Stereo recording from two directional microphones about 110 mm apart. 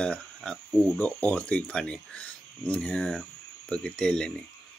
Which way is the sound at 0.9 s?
15° left (ahead or behind).